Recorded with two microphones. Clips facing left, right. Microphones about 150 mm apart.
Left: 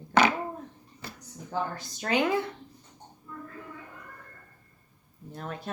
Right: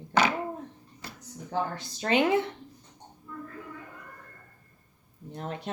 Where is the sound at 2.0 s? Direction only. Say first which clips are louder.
Right 2 dB; 25° right (ahead or behind).